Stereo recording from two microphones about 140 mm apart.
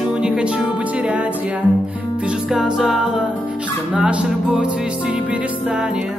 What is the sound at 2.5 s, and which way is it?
Music, centre (ahead or behind).